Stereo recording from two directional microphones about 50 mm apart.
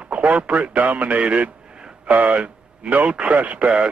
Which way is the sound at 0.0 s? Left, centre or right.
Right.